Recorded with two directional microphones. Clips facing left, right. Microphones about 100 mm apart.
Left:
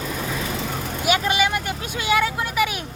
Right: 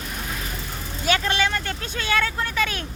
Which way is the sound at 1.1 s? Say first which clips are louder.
Left 2 dB; 15° left (ahead or behind).